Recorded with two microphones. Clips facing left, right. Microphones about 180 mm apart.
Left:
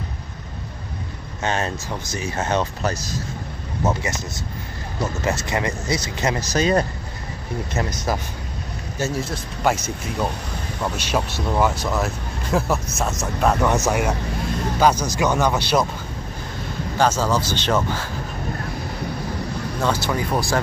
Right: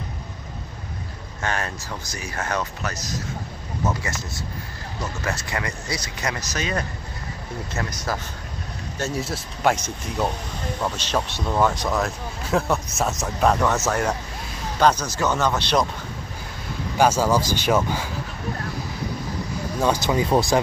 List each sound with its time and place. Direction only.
1.4 s speech: 20° left (ahead or behind)
3.8 s speech: 20° left (ahead or behind); by 6.9 s 35° left (ahead or behind)
7.7 s speech: 20° left (ahead or behind)
8.9 s speech: 5° left (ahead or behind)
13.7 s speech: 15° left (ahead or behind)
16.9 s speech: 10° right (ahead or behind)
19.8 s speech: 15° right (ahead or behind)